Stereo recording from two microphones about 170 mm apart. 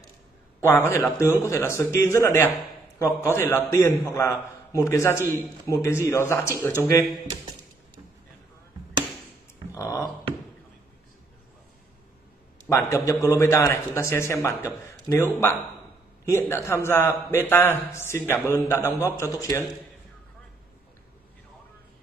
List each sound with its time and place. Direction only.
0.6 s a man's voice: 10° left (ahead or behind)
9.8 s a sound: 20° left (ahead or behind)
12.6 s a man's voice: 15° left (ahead or behind)